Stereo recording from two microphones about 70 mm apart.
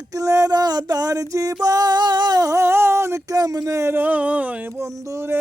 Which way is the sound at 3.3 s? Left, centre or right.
Right.